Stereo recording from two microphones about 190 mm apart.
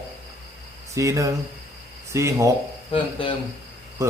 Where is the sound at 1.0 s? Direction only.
15° right (ahead or behind).